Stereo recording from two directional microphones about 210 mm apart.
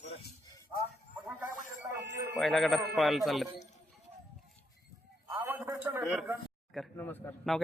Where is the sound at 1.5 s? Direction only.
40° left (ahead or behind).